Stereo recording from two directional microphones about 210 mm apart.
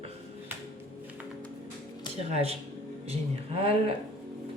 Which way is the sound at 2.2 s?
30° right (ahead or behind).